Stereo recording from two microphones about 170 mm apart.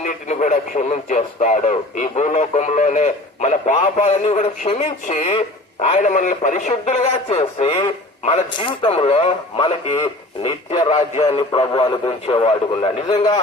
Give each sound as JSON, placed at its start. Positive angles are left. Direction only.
{"t": 0.0, "sound": "speech", "side_deg": 45}